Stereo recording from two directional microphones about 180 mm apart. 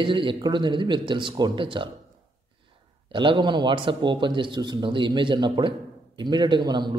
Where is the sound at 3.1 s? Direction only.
25° right (ahead or behind).